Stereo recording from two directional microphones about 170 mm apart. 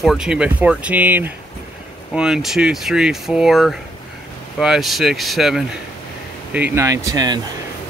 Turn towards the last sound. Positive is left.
turn(degrees=-20)  # may be behind; listen again after turning